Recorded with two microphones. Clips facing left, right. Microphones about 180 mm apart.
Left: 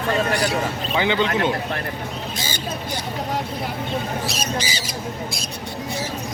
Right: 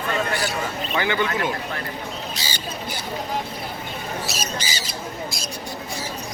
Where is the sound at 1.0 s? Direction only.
20° left (ahead or behind).